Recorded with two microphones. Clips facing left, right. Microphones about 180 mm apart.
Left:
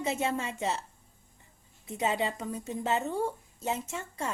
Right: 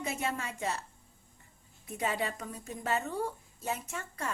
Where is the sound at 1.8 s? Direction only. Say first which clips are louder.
Left 3 dB; 20° left (ahead or behind).